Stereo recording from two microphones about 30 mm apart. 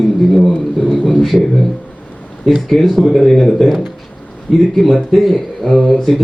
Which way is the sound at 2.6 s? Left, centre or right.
Centre.